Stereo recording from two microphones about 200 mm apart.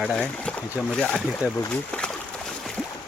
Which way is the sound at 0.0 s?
5° left (ahead or behind).